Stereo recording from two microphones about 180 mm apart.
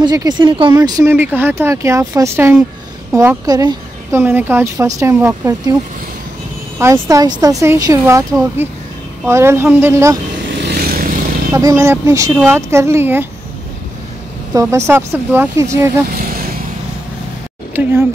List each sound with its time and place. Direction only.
0.0 s speech: 20° right (ahead or behind)
6.8 s speech: 15° right (ahead or behind)
10.7 s vehicle: 55° right (ahead or behind)
11.5 s speech: 15° right (ahead or behind)
14.5 s speech: 15° right (ahead or behind)
16.2 s vehicle: 55° right (ahead or behind)
17.8 s speech: 10° right (ahead or behind)